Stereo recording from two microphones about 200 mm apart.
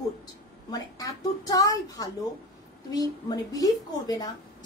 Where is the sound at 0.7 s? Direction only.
20° left (ahead or behind).